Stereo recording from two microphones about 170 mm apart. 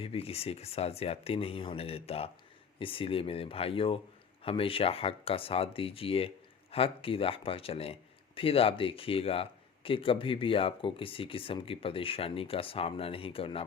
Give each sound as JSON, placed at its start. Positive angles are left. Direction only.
{"t": 0.0, "sound": "speech", "side_deg": 35}